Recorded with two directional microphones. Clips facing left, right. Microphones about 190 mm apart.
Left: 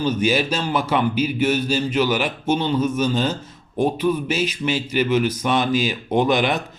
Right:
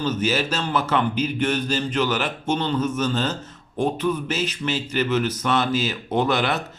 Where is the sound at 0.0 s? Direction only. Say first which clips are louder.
Left 3 dB; 15° left (ahead or behind).